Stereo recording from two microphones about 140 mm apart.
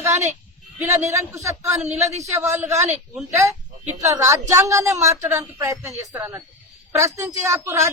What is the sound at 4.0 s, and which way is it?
A woman's voice, 20° right (ahead or behind).